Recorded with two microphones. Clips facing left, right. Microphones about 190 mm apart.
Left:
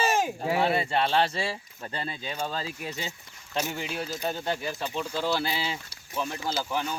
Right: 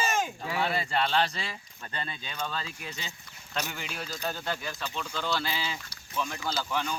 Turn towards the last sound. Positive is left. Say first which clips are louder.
# left 1 dB
turn(degrees=10)  # may be behind; listen again after turning